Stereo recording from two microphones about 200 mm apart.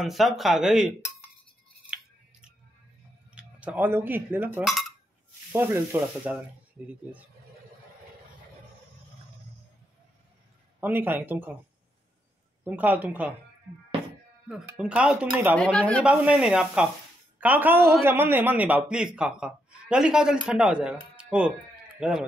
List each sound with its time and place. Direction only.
0.0 s speech: centre (ahead or behind)
3.3 s a man's voice: 5° right (ahead or behind)
10.8 s a man's voice: 10° right (ahead or behind)
12.6 s a man's voice: 10° right (ahead or behind)
14.5 s speech: 5° right (ahead or behind)
15.5 s speech: 5° left (ahead or behind)
16.0 s a man's voice: 5° right (ahead or behind)